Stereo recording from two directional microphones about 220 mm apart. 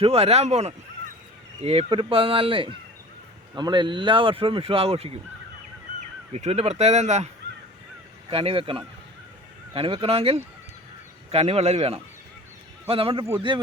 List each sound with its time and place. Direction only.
0.0 s speech: 25° right (ahead or behind)
6.3 s speech: 30° right (ahead or behind)
8.3 s speech: 25° right (ahead or behind)